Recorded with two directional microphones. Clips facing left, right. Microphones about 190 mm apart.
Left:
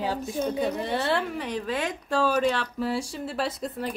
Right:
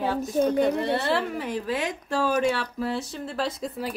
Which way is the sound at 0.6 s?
Centre (ahead or behind).